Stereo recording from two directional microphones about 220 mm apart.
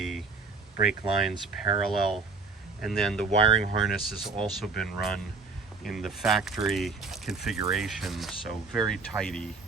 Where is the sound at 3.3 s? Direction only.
25° right (ahead or behind).